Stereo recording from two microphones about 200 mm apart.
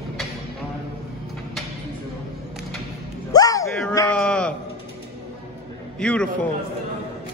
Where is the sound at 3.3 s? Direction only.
15° left (ahead or behind).